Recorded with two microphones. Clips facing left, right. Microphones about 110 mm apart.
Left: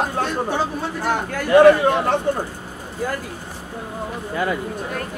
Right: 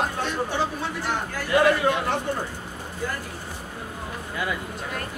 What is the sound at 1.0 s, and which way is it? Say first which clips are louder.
Speech: left 8 dB; 50° left (ahead or behind).